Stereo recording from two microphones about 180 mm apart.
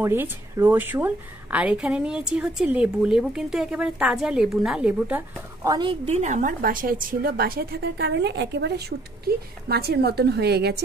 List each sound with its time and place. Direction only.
0.0 s a woman's voice: 10° right (ahead or behind)
5.6 s a woman's voice: 25° right (ahead or behind)
6.0 s a woman's voice: 40° right (ahead or behind); by 10.8 s 65° right (ahead or behind)